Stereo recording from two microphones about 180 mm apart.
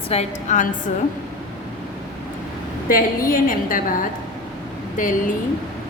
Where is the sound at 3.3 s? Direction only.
50° left (ahead or behind).